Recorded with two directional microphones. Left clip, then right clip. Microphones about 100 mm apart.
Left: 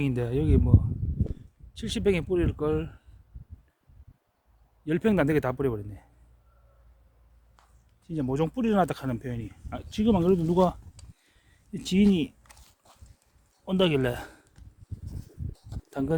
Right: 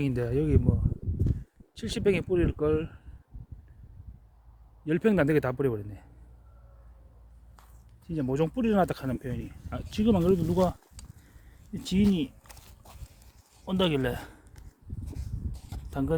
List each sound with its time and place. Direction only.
0.0 s speech: 5° right (ahead or behind)
1.7 s speech: centre (ahead or behind)
4.9 s speech: centre (ahead or behind)
8.0 s speech: centre (ahead or behind); by 10.2 s 15° left (ahead or behind)
10.2 s speech: 30° left (ahead or behind)
11.7 s speech: 60° left (ahead or behind)
13.7 s speech: 35° left (ahead or behind)
14.0 s speech: 55° left (ahead or behind)
15.9 s speech: 40° left (ahead or behind)